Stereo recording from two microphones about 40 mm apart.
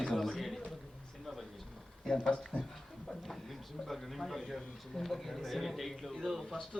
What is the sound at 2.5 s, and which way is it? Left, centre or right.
Speech, right.